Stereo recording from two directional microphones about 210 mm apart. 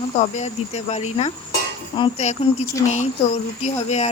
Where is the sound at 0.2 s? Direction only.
35° left (ahead or behind).